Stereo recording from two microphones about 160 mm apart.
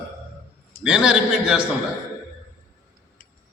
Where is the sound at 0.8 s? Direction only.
5° right (ahead or behind).